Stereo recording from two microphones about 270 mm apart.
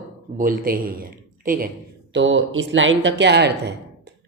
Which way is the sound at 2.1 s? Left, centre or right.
Right.